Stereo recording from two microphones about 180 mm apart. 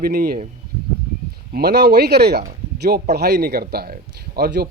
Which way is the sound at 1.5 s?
60° right (ahead or behind).